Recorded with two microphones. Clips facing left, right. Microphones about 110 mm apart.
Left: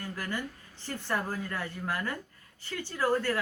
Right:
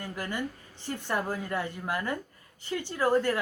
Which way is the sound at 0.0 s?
15° right (ahead or behind).